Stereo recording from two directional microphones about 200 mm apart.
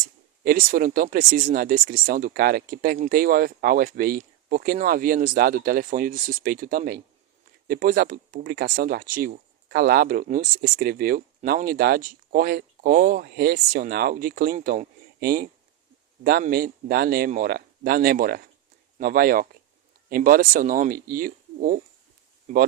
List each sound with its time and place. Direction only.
0.4 s speech: 45° right (ahead or behind)